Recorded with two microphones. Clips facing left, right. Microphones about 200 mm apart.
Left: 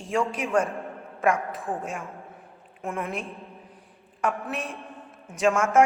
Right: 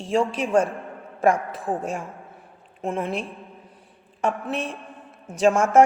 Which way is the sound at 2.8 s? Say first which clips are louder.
Right 4 dB; 25° right (ahead or behind).